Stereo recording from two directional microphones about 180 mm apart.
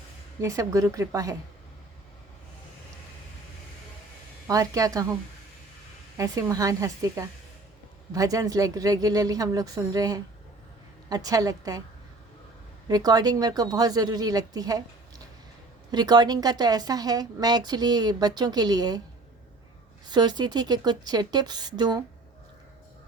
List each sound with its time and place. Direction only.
0.4 s a woman's voice: 20° right (ahead or behind)
4.4 s a woman's voice: 20° right (ahead or behind)
6.1 s a woman's voice: 20° right (ahead or behind)
12.9 s a woman's voice: 20° right (ahead or behind)
15.9 s a woman's voice: 20° right (ahead or behind)
20.1 s a woman's voice: 25° right (ahead or behind)